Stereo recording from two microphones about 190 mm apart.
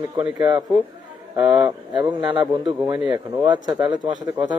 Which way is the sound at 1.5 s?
20° right (ahead or behind).